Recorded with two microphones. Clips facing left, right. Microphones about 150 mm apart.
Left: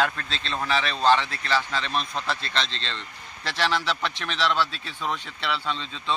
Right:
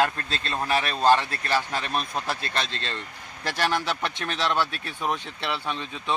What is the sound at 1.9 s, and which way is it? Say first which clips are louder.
Speech: even; 10° right (ahead or behind).